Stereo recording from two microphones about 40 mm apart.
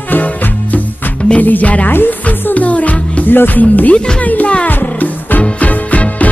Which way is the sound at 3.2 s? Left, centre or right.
Left.